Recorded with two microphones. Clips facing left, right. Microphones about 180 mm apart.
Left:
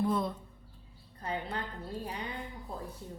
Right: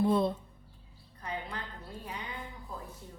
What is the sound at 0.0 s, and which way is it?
Speech, 30° right (ahead or behind).